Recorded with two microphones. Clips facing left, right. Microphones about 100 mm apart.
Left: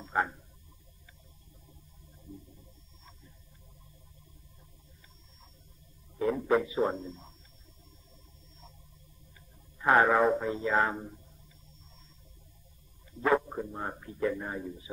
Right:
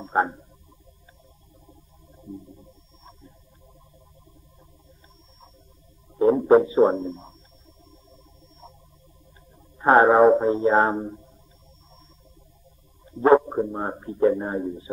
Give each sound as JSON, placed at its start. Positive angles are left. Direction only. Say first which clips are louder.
{"t": 0.0, "sound": "frog", "louder": "right 8 dB", "side_deg": -35}
{"t": 2.6, "sound": "music", "louder": "right 8 dB", "side_deg": -30}
{"t": 6.1, "sound": "a sound", "louder": "right 11 dB", "side_deg": -35}
{"t": 9.8, "sound": "speech", "louder": "right 8 dB", "side_deg": -35}
{"t": 13.0, "sound": "a sound", "louder": "right 11 dB", "side_deg": -35}
{"t": 13.5, "sound": "speech", "louder": "right 10 dB", "side_deg": -35}